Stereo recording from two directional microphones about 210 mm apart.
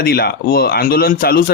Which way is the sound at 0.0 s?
50° left (ahead or behind).